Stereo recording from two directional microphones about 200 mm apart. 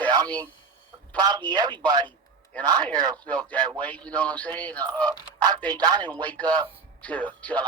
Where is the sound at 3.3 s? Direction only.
5° left (ahead or behind).